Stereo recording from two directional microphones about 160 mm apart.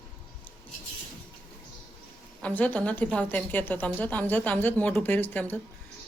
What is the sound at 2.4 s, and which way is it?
A woman's voice, 10° left (ahead or behind).